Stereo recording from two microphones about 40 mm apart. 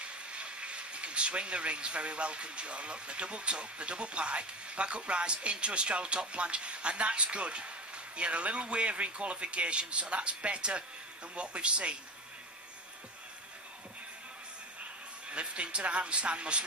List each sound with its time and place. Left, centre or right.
0.0 s speech: right
15.3 s speech: right